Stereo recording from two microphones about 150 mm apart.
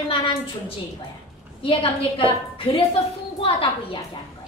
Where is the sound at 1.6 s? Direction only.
35° left (ahead or behind).